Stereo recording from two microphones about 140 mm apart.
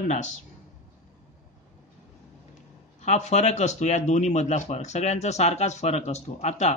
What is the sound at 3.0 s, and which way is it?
Speech, 55° left (ahead or behind).